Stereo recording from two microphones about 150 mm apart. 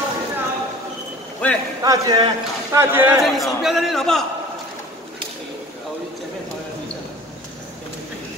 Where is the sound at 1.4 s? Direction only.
10° left (ahead or behind).